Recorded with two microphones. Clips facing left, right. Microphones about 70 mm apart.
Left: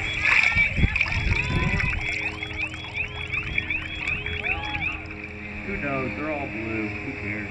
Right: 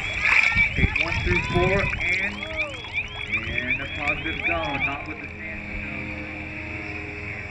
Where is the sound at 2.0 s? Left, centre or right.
Right.